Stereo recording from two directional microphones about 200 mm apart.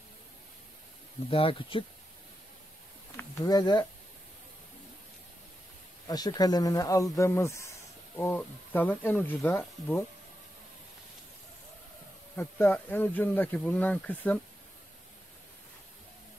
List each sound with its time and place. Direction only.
1.3 s speech: 25° left (ahead or behind)
3.2 s speech: 20° left (ahead or behind)
6.0 s speech: 20° left (ahead or behind)
12.4 s speech: 10° left (ahead or behind)